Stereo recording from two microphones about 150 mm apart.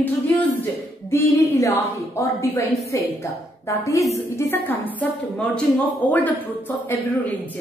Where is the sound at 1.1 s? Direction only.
20° left (ahead or behind).